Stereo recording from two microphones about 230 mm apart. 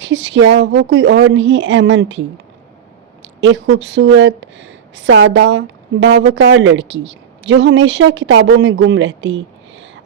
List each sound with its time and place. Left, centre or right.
0.0 s speech: right
3.4 s speech: right